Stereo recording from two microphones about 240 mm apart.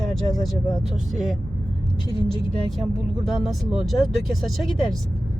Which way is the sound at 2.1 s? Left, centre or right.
Centre.